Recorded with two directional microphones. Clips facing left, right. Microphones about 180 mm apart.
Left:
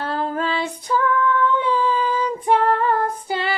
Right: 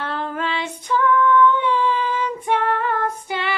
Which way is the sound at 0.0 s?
35° left (ahead or behind).